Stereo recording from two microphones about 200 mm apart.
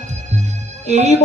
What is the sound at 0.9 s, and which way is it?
Speech, 35° right (ahead or behind).